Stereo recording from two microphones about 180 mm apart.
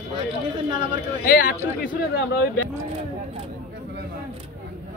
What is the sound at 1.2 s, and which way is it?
Speech, 50° left (ahead or behind).